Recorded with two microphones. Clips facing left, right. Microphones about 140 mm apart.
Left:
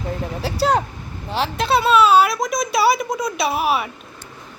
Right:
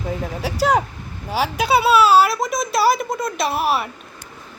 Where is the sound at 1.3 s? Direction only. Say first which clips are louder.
Right 1 dB; 5° right (ahead or behind).